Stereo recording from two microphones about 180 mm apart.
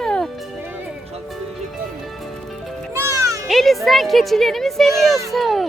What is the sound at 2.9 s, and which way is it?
Music, 15° right (ahead or behind).